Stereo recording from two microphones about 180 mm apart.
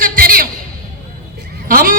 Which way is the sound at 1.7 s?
50° right (ahead or behind).